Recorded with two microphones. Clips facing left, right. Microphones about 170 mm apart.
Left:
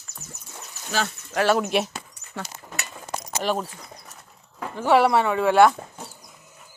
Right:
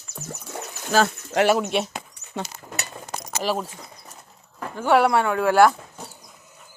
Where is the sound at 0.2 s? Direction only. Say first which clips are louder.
Right 9 dB; 75° right (ahead or behind).